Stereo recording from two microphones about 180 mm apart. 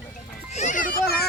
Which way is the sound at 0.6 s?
45° left (ahead or behind).